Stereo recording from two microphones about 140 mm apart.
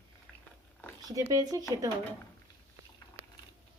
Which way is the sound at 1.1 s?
25° right (ahead or behind).